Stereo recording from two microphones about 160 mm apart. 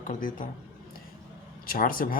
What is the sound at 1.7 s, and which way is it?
Speech, 65° left (ahead or behind).